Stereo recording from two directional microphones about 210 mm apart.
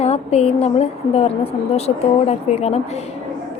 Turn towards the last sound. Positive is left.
turn(degrees=30)  # may be behind; listen again after turning